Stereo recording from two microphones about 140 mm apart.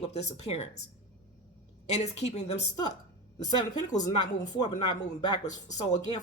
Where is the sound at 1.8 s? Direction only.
50° left (ahead or behind).